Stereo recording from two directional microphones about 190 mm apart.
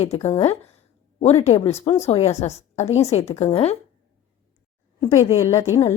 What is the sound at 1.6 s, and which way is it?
A woman's voice, 35° left (ahead or behind).